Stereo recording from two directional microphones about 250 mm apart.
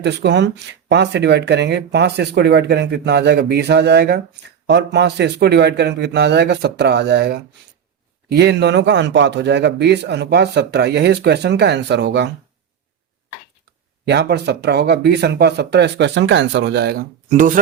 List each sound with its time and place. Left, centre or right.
0.0 s speech: right
14.0 s speech: right